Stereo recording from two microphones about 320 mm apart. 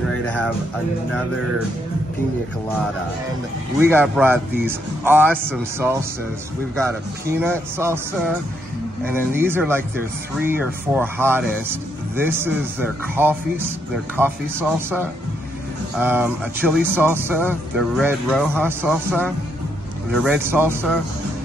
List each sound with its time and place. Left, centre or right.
0.1 s music: centre
3.8 s speech: centre
7.3 s speech: centre
20.2 s speech: centre